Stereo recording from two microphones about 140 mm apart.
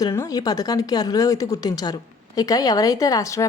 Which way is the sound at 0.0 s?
25° left (ahead or behind).